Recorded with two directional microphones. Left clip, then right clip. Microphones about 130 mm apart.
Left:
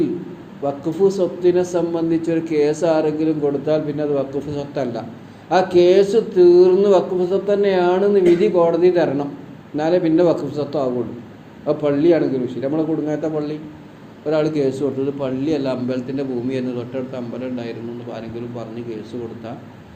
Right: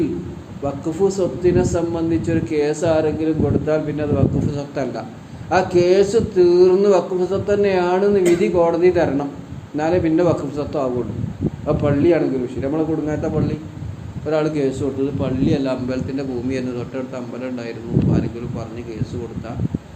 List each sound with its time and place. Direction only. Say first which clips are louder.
0.6 s a man's voice: left 2 dB; 30° left (ahead or behind)